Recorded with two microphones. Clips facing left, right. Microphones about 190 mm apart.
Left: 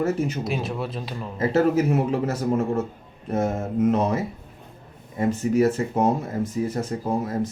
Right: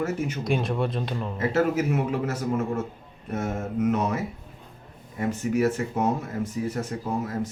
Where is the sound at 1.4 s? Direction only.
35° left (ahead or behind).